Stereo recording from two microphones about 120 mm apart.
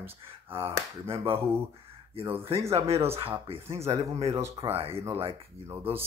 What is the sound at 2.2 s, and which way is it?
Speech, 55° right (ahead or behind).